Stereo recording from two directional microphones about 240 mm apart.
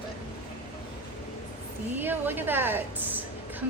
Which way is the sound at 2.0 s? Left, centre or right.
Centre.